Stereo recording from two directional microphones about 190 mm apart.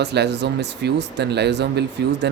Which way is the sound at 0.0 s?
60° right (ahead or behind).